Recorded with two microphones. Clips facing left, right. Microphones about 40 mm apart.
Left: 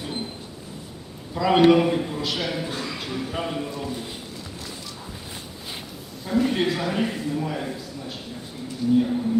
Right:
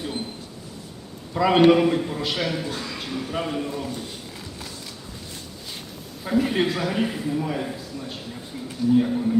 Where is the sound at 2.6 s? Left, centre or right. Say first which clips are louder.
Left 1 dB; centre.